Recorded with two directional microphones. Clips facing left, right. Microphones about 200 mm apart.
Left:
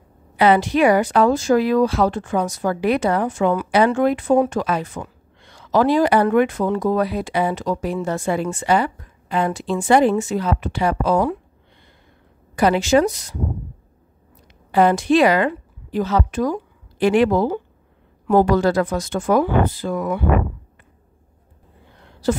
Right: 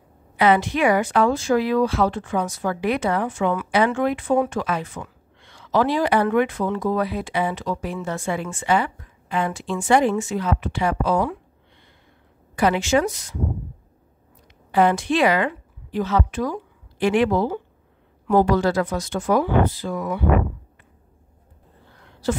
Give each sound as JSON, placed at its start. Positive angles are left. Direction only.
{"t": 0.4, "sound": "speech", "side_deg": 35}
{"t": 12.5, "sound": "speech", "side_deg": 35}
{"t": 14.7, "sound": "a woman's voice", "side_deg": 40}